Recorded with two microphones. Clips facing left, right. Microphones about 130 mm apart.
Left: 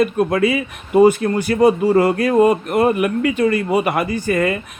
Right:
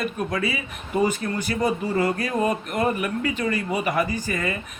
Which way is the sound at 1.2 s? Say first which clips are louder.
Left 10 dB; 50° left (ahead or behind).